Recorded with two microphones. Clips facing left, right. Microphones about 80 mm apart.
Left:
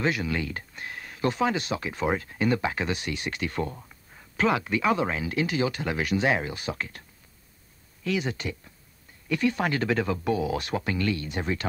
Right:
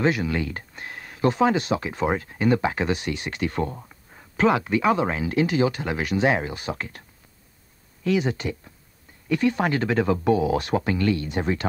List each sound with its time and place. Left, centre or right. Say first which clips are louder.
0.0 s speech: right 4 dB; right
8.0 s speech: right 5 dB; right